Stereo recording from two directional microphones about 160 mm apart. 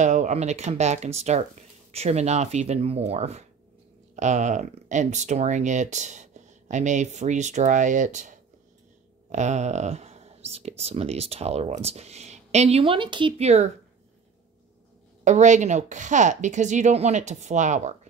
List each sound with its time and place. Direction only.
0.0 s speech: 50° right (ahead or behind)
15.2 s speech: 50° right (ahead or behind)